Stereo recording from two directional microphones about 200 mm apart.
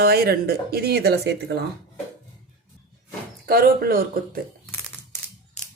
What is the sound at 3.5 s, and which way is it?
Speech, 50° right (ahead or behind).